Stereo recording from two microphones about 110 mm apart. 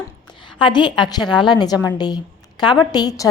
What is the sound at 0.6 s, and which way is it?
A woman's voice, 45° left (ahead or behind).